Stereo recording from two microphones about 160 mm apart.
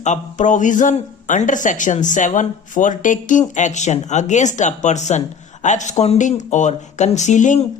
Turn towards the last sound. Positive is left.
turn(degrees=50)  # may be behind; listen again after turning